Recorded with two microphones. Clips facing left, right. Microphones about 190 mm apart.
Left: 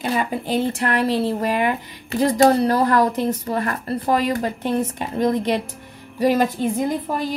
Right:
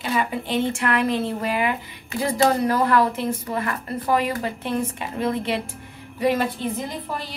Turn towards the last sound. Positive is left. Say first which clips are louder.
# left 8 dB
turn(degrees=45)  # may be behind; listen again after turning